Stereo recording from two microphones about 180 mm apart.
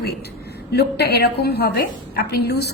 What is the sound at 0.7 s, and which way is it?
A woman's voice, 65° left (ahead or behind).